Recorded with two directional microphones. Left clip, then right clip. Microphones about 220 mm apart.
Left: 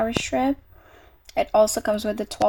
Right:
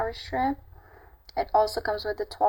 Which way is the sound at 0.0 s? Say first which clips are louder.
Left 5 dB; 50° left (ahead or behind).